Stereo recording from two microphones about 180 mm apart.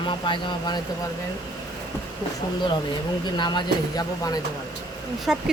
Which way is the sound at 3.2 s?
25° left (ahead or behind).